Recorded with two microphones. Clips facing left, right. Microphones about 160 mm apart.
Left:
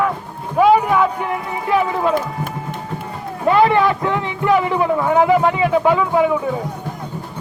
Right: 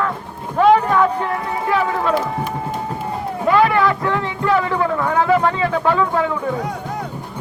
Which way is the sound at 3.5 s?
20° left (ahead or behind).